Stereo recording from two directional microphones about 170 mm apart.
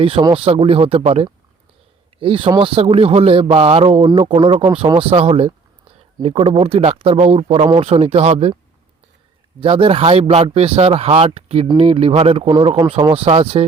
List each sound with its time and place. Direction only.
0.0 s a man's voice: 35° right (ahead or behind)
9.6 s a man's voice: 30° right (ahead or behind)